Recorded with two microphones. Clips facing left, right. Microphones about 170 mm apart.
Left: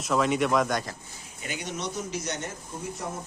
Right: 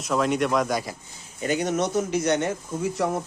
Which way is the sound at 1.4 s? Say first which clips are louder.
Right 11 dB; 45° right (ahead or behind).